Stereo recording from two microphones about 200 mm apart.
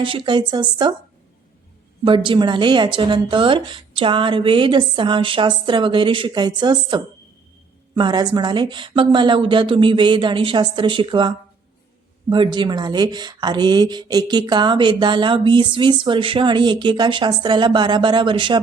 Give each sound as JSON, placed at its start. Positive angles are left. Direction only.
{"t": 0.0, "sound": "speech", "side_deg": -25}
{"t": 2.0, "sound": "speech", "side_deg": -25}